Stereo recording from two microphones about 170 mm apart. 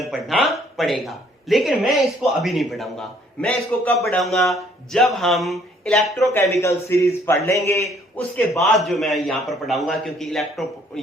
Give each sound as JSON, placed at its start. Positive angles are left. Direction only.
{"t": 0.0, "sound": "a sound", "side_deg": 0}
{"t": 0.8, "sound": "a man's voice", "side_deg": 0}
{"t": 6.3, "sound": "a man's voice", "side_deg": 15}
{"t": 8.5, "sound": "a man's voice", "side_deg": 0}